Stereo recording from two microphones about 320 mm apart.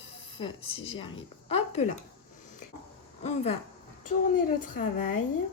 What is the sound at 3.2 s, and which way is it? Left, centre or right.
Speech, centre.